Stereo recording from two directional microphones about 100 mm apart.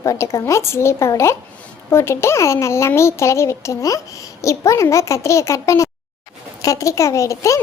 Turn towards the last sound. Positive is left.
turn(degrees=30)  # may be behind; listen again after turning